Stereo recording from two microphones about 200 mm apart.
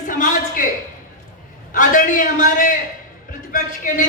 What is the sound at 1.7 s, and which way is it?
A man's voice, 40° left (ahead or behind).